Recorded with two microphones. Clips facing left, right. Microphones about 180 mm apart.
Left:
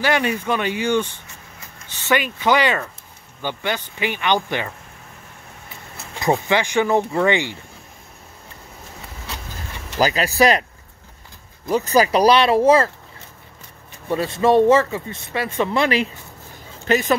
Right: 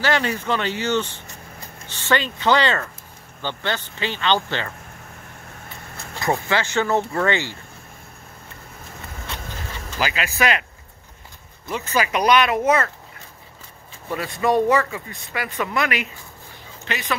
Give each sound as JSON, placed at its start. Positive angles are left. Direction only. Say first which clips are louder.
{"t": 0.0, "sound": "speech", "louder": "left 2 dB", "side_deg": 15}
{"t": 6.2, "sound": "speech", "louder": "left 3 dB", "side_deg": 20}
{"t": 9.9, "sound": "speech", "louder": "left 7 dB", "side_deg": 40}
{"t": 11.7, "sound": "speech", "louder": "left 6 dB", "side_deg": 40}
{"t": 14.0, "sound": "speech", "louder": "left 4 dB", "side_deg": 25}
{"t": 16.8, "sound": "speech", "louder": "left 11 dB", "side_deg": 45}